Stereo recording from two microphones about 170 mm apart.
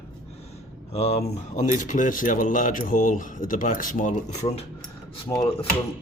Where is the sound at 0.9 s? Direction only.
40° left (ahead or behind).